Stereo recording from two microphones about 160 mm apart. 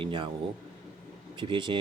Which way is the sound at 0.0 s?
30° right (ahead or behind).